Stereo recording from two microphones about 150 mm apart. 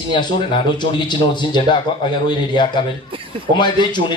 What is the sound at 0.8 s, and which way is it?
A man's voice, 30° left (ahead or behind).